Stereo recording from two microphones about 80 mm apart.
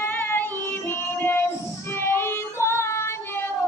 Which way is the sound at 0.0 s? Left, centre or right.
Left.